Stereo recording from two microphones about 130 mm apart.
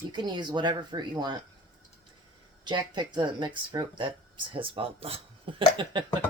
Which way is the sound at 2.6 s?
35° right (ahead or behind).